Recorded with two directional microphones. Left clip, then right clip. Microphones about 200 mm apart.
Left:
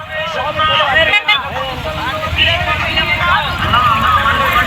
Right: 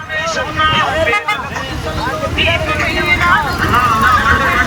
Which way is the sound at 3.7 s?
15° right (ahead or behind).